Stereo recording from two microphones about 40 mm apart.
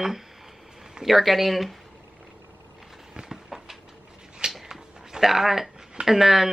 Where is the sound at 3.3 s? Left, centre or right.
Centre.